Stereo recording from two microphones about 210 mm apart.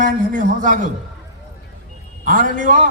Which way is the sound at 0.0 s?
40° right (ahead or behind).